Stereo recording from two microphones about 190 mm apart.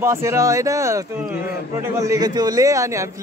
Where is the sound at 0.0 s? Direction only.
15° right (ahead or behind).